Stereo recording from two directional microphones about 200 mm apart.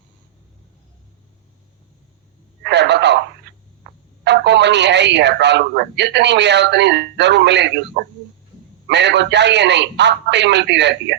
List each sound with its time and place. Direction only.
2.6 s radio: 60° right (ahead or behind)
4.2 s a man's voice: 60° right (ahead or behind)